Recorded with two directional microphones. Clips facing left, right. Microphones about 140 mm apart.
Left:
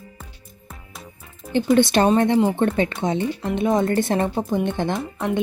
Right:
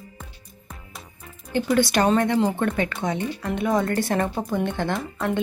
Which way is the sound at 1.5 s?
25° left (ahead or behind).